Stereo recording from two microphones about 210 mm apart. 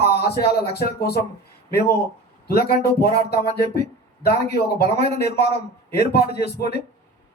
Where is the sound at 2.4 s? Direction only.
45° left (ahead or behind).